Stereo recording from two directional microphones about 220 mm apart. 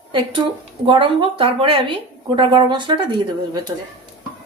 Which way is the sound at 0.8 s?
20° right (ahead or behind).